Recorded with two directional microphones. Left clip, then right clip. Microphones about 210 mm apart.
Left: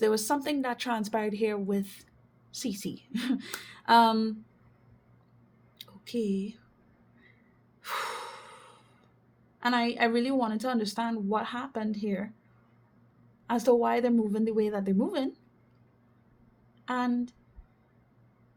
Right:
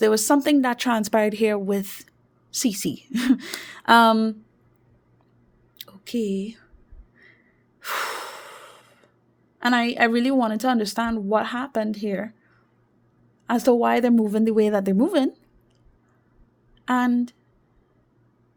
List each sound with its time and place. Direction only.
0.0 s speech: 55° right (ahead or behind)
5.7 s a sound: 50° right (ahead or behind)
7.8 s gasp: 50° right (ahead or behind)
9.6 s speech: 50° right (ahead or behind)
13.5 s speech: 50° right (ahead or behind)
16.8 s speech: 55° right (ahead or behind)